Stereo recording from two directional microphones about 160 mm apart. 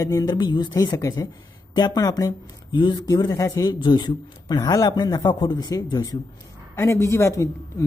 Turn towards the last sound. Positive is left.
turn(degrees=20)  # may be behind; listen again after turning